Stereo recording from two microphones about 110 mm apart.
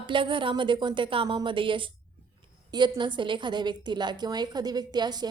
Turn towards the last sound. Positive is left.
turn(degrees=-40)  # may be behind; listen again after turning